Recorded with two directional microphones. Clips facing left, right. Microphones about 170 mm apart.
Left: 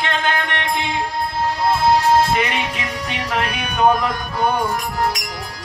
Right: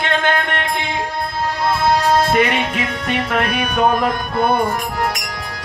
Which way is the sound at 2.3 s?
55° right (ahead or behind).